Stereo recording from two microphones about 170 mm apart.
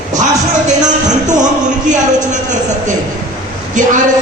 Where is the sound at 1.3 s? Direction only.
45° right (ahead or behind).